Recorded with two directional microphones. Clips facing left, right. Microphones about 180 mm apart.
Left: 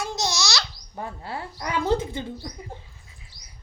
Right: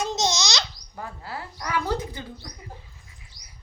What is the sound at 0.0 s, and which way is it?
Babbling, 20° right (ahead or behind).